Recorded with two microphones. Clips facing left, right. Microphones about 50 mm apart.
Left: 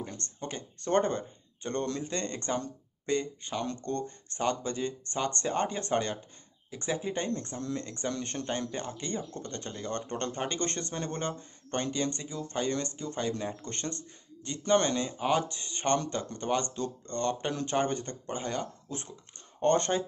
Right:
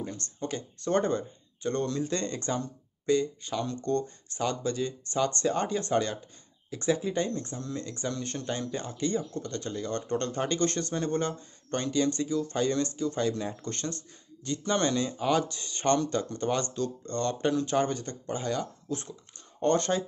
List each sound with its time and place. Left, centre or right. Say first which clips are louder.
0.1 s speech: right 4 dB; left
7.2 s speech: even; left
17.5 s speech: right 3 dB; left